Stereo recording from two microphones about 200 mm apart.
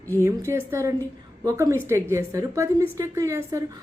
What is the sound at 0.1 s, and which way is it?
A woman's voice, 15° right (ahead or behind).